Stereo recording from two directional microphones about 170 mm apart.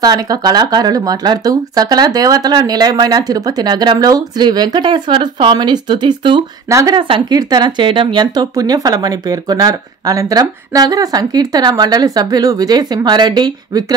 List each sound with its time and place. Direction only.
0.0 s speech: 20° right (ahead or behind)
6.7 s speech: 15° right (ahead or behind)
7.0 s speech: 30° right (ahead or behind)